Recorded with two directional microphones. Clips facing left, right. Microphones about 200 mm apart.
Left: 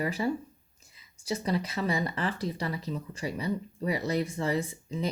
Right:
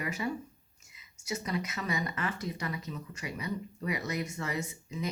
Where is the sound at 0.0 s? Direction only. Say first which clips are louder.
Left 5 dB; 30° left (ahead or behind).